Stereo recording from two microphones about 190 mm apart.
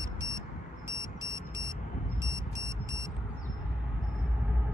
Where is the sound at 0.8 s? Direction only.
15° right (ahead or behind).